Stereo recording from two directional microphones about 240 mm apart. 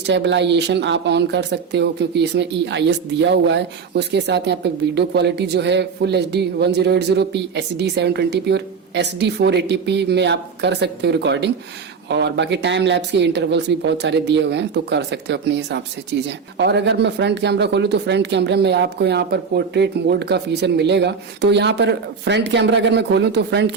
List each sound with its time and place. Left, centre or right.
0.0 s speech: right